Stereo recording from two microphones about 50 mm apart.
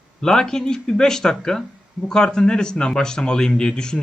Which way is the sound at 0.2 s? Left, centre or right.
Centre.